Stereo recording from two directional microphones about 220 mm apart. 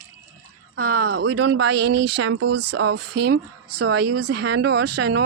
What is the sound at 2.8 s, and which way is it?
Speech, 90° right.